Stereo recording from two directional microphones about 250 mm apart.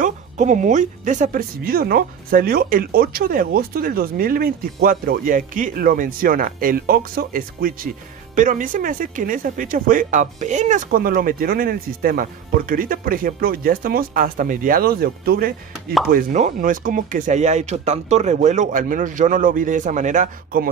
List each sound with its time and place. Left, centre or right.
0.0 s speech: right